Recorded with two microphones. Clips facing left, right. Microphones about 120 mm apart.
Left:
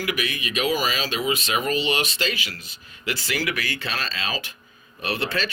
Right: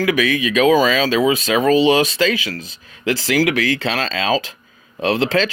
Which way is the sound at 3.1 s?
90° right.